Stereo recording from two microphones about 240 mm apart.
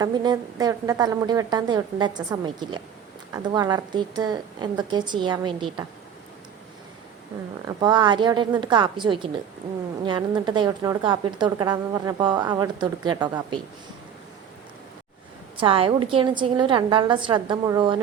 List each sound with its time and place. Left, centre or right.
0.0 s a woman's voice: centre
7.7 s a woman's voice: centre
15.5 s a woman's voice: right